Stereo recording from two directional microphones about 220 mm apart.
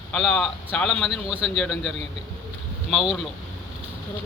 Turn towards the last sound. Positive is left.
turn(degrees=0)  # may be behind; listen again after turning